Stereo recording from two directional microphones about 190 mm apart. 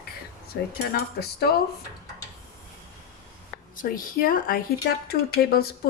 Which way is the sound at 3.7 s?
50° left (ahead or behind).